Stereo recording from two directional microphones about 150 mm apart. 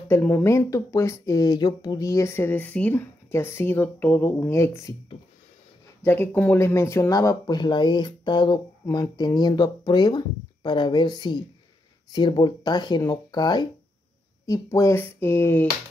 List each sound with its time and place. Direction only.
0.1 s speech: 15° left (ahead or behind)
6.0 s speech: 15° left (ahead or behind)